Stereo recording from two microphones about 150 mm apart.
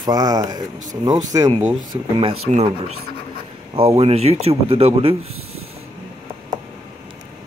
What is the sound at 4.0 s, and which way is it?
Speech, 45° right (ahead or behind).